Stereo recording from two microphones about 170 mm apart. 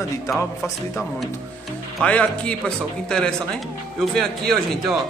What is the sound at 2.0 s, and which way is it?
Speech, 5° left (ahead or behind).